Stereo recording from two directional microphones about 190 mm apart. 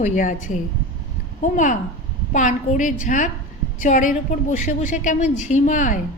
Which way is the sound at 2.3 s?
40° left (ahead or behind).